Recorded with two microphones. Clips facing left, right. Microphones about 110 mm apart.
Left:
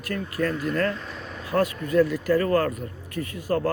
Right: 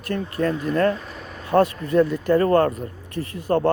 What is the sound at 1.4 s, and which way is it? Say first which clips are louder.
Speech: right 6 dB; 30° right (ahead or behind).